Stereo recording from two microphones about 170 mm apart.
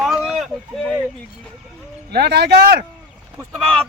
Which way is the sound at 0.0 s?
Centre (ahead or behind).